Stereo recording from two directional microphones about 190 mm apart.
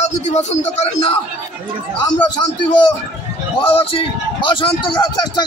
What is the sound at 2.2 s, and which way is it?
A man's voice, 20° left (ahead or behind).